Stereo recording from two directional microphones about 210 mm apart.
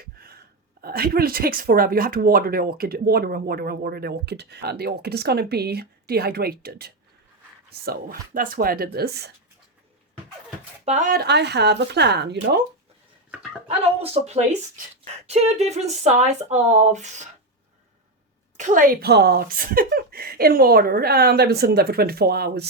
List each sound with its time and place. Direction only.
0.0 s a sound: 45° right (ahead or behind)
0.8 s speech: 45° right (ahead or behind)
10.8 s speech: 35° right (ahead or behind); by 12.5 s 55° right (ahead or behind)
13.7 s speech: 30° right (ahead or behind)
18.5 s speech: 35° right (ahead or behind)